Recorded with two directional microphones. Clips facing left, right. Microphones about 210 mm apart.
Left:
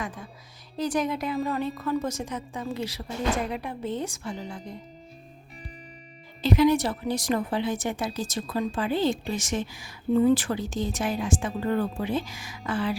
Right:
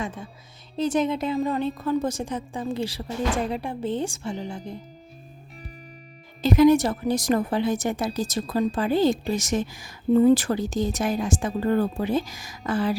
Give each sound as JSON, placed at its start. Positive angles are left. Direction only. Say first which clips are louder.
{"t": 0.0, "sound": "a woman's voice", "louder": "right 3 dB", "side_deg": -25}
{"t": 6.4, "sound": "speech", "louder": "right 4 dB", "side_deg": -45}